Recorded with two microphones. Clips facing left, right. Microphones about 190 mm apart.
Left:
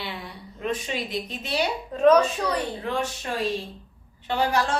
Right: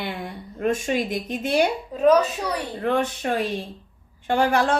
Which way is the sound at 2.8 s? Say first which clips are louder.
Right 6 dB; 55° right (ahead or behind).